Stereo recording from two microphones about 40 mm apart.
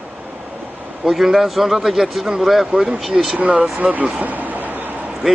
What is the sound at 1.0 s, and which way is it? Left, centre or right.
Speech, centre.